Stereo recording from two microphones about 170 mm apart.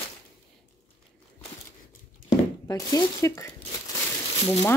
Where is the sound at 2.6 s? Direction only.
20° left (ahead or behind).